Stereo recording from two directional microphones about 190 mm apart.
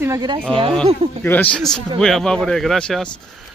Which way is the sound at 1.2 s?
10° left (ahead or behind).